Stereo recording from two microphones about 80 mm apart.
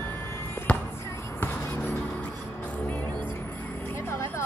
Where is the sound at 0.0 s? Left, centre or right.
Left.